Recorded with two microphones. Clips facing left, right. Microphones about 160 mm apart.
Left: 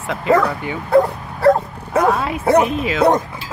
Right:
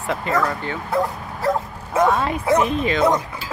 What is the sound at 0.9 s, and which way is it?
Speech, 65° left (ahead or behind).